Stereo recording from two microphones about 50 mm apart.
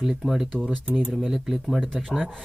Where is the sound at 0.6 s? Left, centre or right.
Right.